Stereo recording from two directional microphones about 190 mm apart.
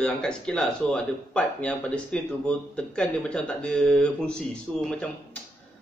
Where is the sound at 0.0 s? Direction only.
5° left (ahead or behind).